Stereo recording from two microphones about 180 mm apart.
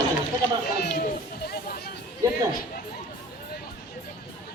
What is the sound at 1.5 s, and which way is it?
Speech, 55° left (ahead or behind).